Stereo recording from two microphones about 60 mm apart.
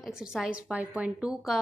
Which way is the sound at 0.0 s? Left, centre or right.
Centre.